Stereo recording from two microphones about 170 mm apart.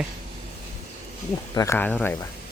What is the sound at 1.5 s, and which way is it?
Speech, 15° left (ahead or behind).